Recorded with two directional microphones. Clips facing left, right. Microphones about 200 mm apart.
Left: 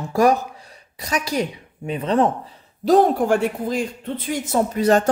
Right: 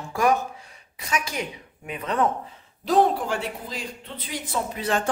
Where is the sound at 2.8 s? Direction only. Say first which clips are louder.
Left 5 dB; 45° left (ahead or behind).